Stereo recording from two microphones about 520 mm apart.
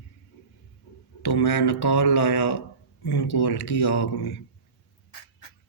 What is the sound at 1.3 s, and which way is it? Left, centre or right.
Speech, left.